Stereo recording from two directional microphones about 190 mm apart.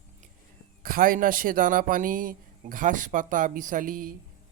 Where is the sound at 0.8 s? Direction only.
50° right (ahead or behind).